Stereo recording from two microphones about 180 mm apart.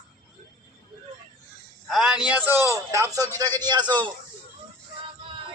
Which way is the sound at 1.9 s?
Centre (ahead or behind).